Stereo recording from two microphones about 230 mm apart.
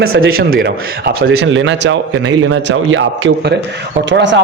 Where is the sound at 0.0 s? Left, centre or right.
Right.